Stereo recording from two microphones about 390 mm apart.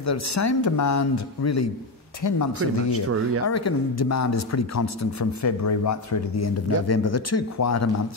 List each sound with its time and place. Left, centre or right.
0.0 s speech: left
2.9 s speech: right
3.4 s speech: left